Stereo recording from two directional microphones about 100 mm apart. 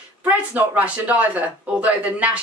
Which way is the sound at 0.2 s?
15° right (ahead or behind).